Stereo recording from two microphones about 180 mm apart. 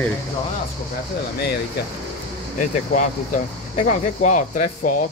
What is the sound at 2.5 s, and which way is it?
Speech, 45° left (ahead or behind).